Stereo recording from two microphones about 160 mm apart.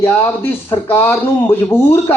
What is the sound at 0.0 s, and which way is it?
Speech, 15° left (ahead or behind).